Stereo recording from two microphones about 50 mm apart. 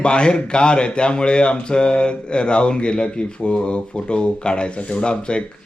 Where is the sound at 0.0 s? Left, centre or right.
Centre.